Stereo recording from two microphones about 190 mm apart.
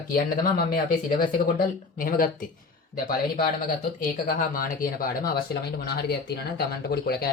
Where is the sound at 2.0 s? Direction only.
50° left (ahead or behind).